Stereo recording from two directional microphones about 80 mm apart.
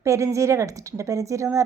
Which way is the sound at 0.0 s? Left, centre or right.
Right.